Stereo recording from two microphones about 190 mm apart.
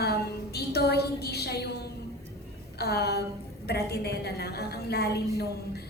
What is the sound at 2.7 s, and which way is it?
A woman's voice, 55° left (ahead or behind).